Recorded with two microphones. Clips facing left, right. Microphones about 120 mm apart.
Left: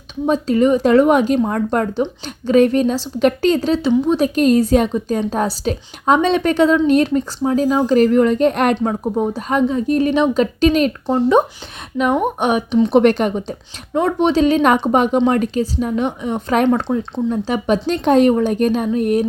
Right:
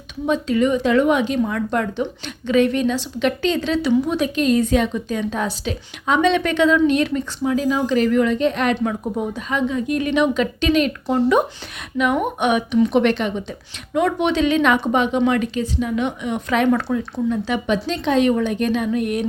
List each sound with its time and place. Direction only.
0.4 s a woman's voice: 40° left (ahead or behind)
8.8 s a woman's voice: 35° left (ahead or behind)
16.6 s a woman's voice: 25° left (ahead or behind)